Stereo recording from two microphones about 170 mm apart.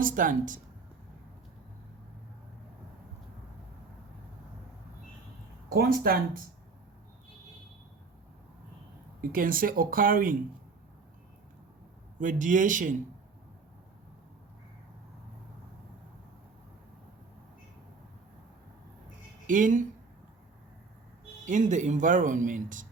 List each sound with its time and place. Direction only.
0.0 s speech: 50° right (ahead or behind)
5.7 s speech: 65° right (ahead or behind)
9.2 s speech: 55° right (ahead or behind)
12.2 s speech: 50° right (ahead or behind)
19.5 s speech: 50° right (ahead or behind)
21.4 s speech: 45° right (ahead or behind)